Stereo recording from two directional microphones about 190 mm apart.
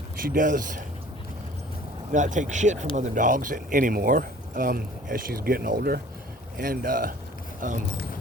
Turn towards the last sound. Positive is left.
turn(degrees=-45)  # may be behind; listen again after turning